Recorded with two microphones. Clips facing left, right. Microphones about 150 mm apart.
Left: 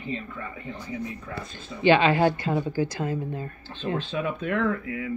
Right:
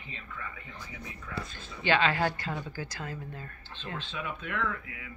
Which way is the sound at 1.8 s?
20° left (ahead or behind).